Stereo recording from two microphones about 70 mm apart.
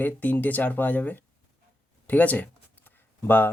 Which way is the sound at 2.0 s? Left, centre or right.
Left.